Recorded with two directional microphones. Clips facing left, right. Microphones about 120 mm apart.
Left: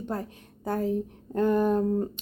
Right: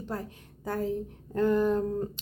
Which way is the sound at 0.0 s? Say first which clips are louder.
Left 3 dB; 20° left (ahead or behind).